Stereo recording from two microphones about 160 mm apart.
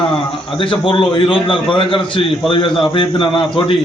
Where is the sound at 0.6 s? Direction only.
30° left (ahead or behind).